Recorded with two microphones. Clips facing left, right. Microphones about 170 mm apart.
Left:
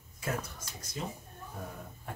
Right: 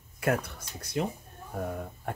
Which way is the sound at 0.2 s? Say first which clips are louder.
Right 8 dB; 65° right (ahead or behind).